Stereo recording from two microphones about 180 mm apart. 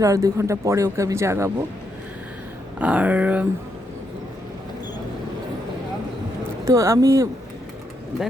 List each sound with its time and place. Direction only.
0.0 s speech: 20° right (ahead or behind)
2.7 s speech: 5° right (ahead or behind)
6.7 s speech: 15° right (ahead or behind)